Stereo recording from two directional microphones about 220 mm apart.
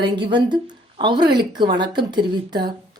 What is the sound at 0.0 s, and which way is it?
A woman's voice, 20° right (ahead or behind).